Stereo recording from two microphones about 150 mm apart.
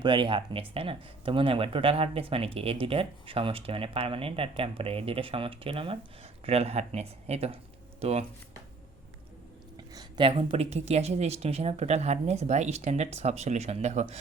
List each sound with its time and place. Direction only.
0.0 s speech: 35° right (ahead or behind)
9.7 s speech: 25° right (ahead or behind); by 14.2 s 50° right (ahead or behind)